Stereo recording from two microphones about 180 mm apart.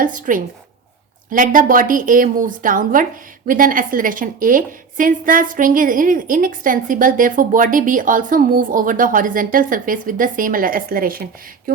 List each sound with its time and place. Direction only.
0.0 s a woman's voice: 45° right (ahead or behind)